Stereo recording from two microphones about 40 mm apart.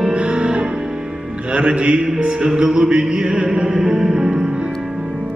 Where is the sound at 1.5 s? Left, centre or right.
Right.